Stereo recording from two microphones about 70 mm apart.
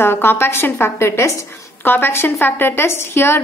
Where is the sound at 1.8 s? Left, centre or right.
Left.